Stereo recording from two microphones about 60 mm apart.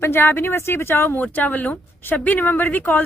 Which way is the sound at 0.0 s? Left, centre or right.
Left.